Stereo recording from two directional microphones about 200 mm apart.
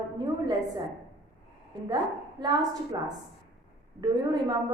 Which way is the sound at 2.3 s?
20° right (ahead or behind).